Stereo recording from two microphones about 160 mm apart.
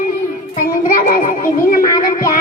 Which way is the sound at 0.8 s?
60° left (ahead or behind).